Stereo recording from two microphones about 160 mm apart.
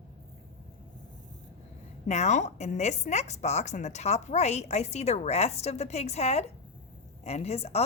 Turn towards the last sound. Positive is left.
turn(degrees=40)  # may be behind; listen again after turning